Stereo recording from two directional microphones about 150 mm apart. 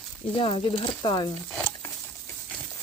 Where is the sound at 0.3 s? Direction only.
35° left (ahead or behind).